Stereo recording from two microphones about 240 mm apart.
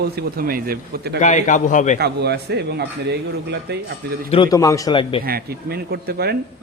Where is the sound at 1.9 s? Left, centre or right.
Right.